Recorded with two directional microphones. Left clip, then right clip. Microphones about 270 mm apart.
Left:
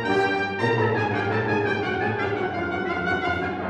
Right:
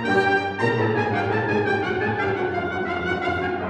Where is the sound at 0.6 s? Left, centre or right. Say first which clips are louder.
Right 1 dB; right.